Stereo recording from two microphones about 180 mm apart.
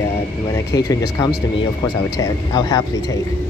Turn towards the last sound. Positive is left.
turn(degrees=20)  # may be behind; listen again after turning